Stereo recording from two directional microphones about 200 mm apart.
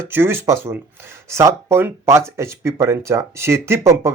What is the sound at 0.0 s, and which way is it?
Speech, 10° right (ahead or behind).